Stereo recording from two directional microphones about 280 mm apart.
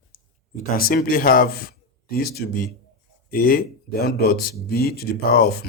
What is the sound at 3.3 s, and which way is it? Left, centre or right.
Speech, left.